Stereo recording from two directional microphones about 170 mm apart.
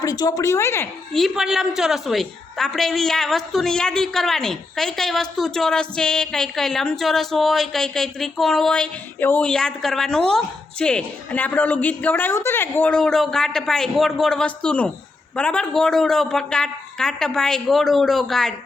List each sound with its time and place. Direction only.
0.0 s speech: 20° left (ahead or behind)
1.1 s a woman's voice: centre (ahead or behind)